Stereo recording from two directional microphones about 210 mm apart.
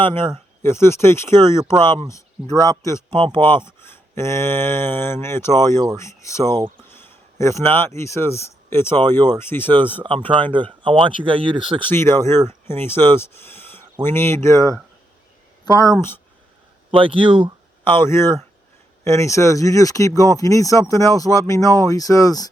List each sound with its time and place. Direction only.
0.0 s speech: 25° right (ahead or behind)
0.6 s speech: 10° left (ahead or behind)
1.3 s speech: 20° right (ahead or behind)
2.6 s speech: 15° left (ahead or behind)
3.1 s speech: 25° right (ahead or behind)
3.8 s a man's voice: 10° left (ahead or behind)
9.0 s speech: 20° right (ahead or behind)
9.4 s speech: 10° left (ahead or behind)
10.0 s speech: 20° right (ahead or behind)
11.9 s speech: 10° left (ahead or behind)
16.9 s speech: 25° right (ahead or behind)
17.9 s speech: 10° left (ahead or behind)